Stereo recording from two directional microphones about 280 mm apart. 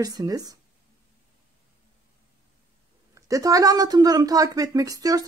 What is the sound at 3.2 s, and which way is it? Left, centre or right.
A woman's voice, centre.